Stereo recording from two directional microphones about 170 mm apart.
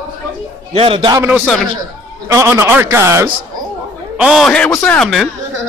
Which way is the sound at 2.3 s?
15° right (ahead or behind).